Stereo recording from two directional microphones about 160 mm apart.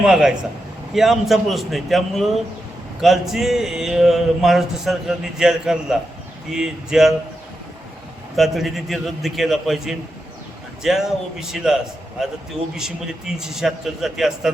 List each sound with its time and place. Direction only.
0.0 s speech: 5° right (ahead or behind)
8.4 s speech: centre (ahead or behind)